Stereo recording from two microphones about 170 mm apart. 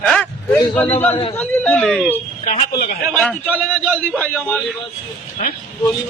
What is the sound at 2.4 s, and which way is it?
Speech, 50° left (ahead or behind).